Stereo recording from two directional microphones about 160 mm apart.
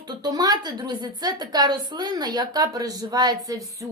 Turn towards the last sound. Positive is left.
turn(degrees=-20)  # may be behind; listen again after turning